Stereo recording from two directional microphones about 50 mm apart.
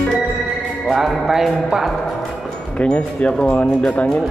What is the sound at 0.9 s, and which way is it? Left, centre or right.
A man's voice, centre.